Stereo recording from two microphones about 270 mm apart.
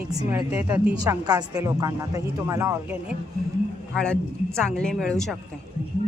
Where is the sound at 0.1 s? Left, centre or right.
Centre.